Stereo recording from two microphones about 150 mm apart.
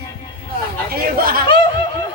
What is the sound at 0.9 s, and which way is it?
Speech, 80° right.